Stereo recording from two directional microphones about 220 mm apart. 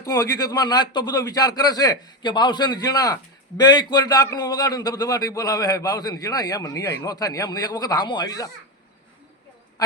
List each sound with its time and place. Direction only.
0.0 s a man's voice: 15° left (ahead or behind)